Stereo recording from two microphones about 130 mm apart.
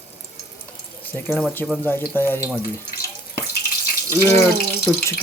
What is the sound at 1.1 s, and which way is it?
Speech, 15° left (ahead or behind).